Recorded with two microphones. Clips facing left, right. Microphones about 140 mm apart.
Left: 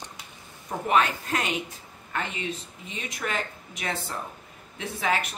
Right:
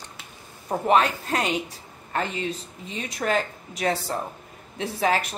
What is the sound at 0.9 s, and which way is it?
Speech, 35° right (ahead or behind).